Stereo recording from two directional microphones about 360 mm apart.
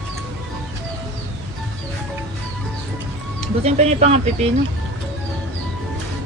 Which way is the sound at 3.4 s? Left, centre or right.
Centre.